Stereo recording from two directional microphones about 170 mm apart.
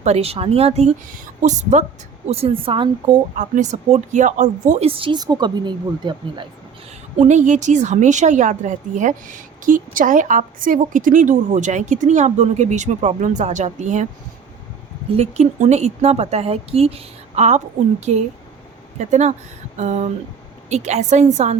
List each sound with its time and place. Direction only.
0.0 s a woman's voice: 40° right (ahead or behind)
3.3 s a woman's voice: 45° right (ahead or behind)
4.9 s speech: 30° right (ahead or behind)
7.2 s a woman's voice: 45° right (ahead or behind)
15.1 s a woman's voice: 40° right (ahead or behind)
18.9 s a woman's voice: 45° right (ahead or behind)